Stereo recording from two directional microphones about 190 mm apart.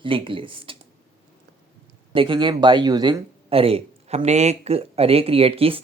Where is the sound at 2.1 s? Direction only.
25° right (ahead or behind).